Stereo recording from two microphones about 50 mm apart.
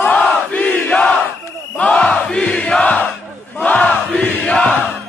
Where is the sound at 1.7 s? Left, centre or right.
Centre.